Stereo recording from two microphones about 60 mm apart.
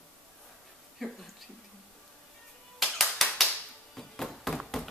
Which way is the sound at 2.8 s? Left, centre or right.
Centre.